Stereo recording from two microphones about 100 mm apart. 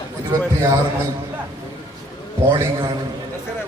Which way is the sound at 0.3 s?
30° right (ahead or behind).